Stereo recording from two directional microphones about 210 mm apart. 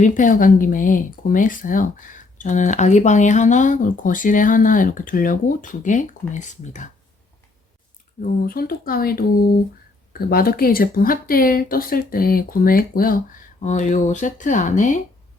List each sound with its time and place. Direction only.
0.0 s speech: 40° left (ahead or behind)
8.2 s speech: 45° left (ahead or behind)